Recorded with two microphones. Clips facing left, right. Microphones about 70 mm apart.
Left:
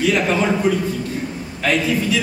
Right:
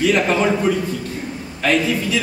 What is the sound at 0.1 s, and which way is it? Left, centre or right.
A man's voice, centre.